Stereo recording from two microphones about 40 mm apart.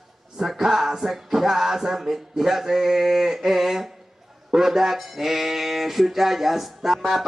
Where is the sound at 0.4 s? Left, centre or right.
Centre.